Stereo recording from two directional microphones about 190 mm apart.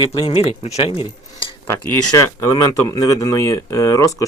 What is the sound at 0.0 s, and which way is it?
Speech, 30° left (ahead or behind).